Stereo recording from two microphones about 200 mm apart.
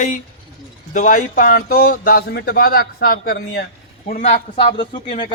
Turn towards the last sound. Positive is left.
turn(degrees=25)  # may be behind; listen again after turning